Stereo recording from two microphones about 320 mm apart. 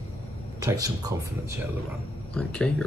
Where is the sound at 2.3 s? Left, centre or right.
Centre.